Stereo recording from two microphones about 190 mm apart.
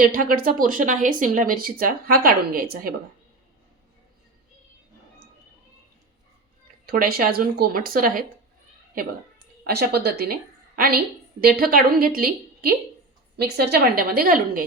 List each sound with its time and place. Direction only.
0.0 s speech: 50° right (ahead or behind)
6.8 s speech: 50° right (ahead or behind)
9.6 s a woman's voice: 55° right (ahead or behind)